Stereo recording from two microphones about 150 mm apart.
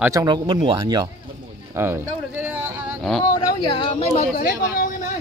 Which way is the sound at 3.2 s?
25° left (ahead or behind).